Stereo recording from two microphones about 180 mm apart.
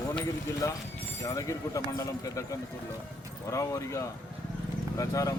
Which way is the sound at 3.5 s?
15° left (ahead or behind).